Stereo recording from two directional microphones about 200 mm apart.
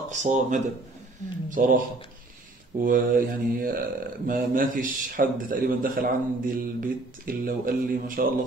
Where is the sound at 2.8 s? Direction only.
40° right (ahead or behind).